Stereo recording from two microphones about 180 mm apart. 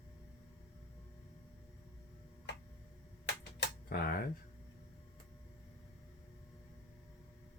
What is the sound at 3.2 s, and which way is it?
Typewriter, 65° left (ahead or behind).